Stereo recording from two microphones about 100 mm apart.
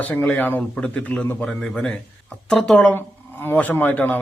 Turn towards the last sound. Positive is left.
turn(degrees=20)  # may be behind; listen again after turning